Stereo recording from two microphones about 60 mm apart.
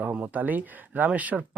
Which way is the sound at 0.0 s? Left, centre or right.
Right.